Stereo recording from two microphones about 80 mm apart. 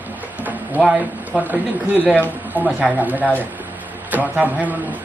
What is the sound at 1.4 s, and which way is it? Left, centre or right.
Speech, right.